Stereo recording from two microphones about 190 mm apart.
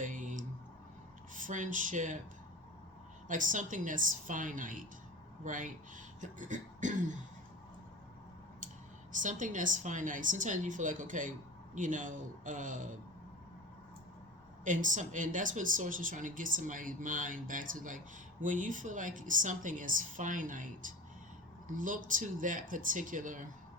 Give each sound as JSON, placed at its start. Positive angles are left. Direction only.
{"t": 0.0, "sound": "a sound", "side_deg": -45}
{"t": 1.3, "sound": "speech", "side_deg": -40}
{"t": 3.2, "sound": "a woman's voice", "side_deg": -45}
{"t": 6.1, "sound": "beatboxing", "side_deg": -40}
{"t": 9.1, "sound": "a woman's voice", "side_deg": -45}
{"t": 14.6, "sound": "a woman's voice", "side_deg": -45}